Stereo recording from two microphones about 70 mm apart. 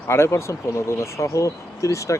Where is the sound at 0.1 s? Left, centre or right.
Left.